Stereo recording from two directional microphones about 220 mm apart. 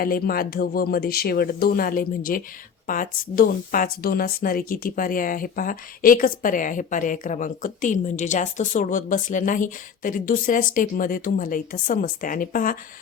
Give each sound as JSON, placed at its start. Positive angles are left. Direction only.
{"t": 0.0, "sound": "speech", "side_deg": 40}